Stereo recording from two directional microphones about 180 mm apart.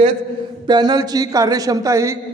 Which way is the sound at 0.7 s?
25° right (ahead or behind).